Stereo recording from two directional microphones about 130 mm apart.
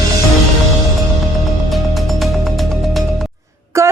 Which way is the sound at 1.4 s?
Centre (ahead or behind).